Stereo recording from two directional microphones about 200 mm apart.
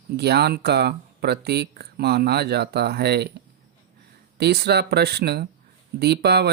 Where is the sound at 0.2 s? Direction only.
55° right (ahead or behind).